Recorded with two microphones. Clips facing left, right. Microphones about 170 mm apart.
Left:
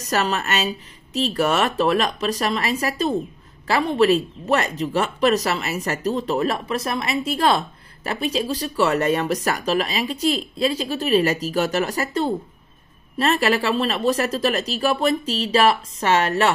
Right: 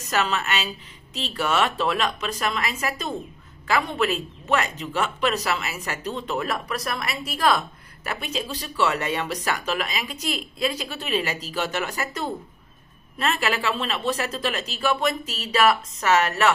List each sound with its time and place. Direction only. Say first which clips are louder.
0.0 s speech: left 2 dB; 40° left (ahead or behind)